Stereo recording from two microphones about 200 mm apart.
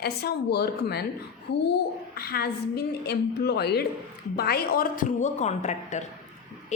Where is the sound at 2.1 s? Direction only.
50° left (ahead or behind).